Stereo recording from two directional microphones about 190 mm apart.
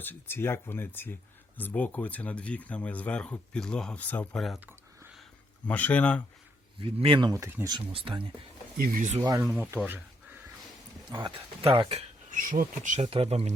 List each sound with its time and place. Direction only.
0.0 s speech: 10° left (ahead or behind)
6.7 s speech: 25° right (ahead or behind)
7.9 s speech: 25° right (ahead or behind)
8.8 s speech: 45° right (ahead or behind)
9.4 s speech: 5° right (ahead or behind)
11.1 s speech: 25° right (ahead or behind)